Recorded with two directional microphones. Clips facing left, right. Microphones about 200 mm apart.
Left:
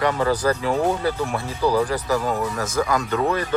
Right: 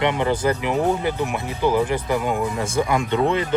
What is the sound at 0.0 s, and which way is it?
Speech, 20° right (ahead or behind).